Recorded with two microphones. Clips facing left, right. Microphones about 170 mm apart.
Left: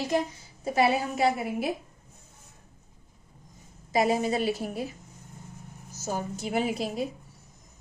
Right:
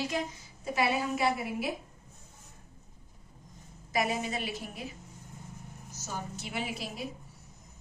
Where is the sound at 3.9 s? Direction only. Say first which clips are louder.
Left 7 dB; 30° left (ahead or behind).